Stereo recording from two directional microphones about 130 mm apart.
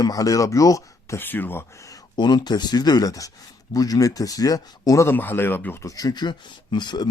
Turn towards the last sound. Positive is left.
turn(degrees=35)  # may be behind; listen again after turning